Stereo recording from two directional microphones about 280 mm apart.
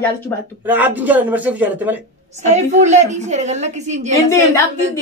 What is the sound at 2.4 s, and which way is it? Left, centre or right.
A woman's voice, right.